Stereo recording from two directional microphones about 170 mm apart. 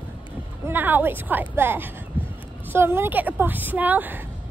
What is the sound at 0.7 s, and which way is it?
A woman's voice, 10° right (ahead or behind).